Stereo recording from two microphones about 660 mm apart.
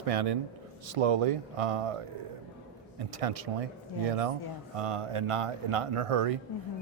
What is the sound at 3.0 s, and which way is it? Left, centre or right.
Speech, right.